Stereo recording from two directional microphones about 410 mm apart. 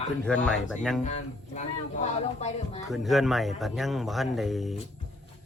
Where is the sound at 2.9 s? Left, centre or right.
Centre.